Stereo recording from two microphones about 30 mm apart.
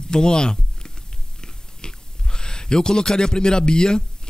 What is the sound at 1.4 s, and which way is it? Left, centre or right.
Chewing, left.